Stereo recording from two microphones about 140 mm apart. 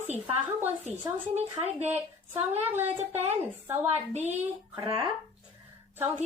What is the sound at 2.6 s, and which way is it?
A woman's voice, 15° right (ahead or behind).